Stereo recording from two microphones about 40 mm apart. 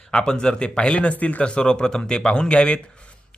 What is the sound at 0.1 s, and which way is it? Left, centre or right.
Speech, left.